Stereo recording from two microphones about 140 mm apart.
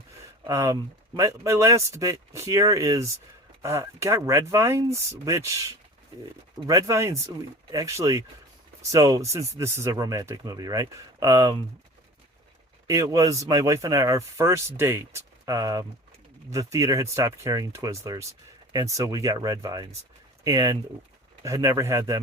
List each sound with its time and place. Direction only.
0.4 s speech: 25° right (ahead or behind)
12.9 s speech: 25° right (ahead or behind)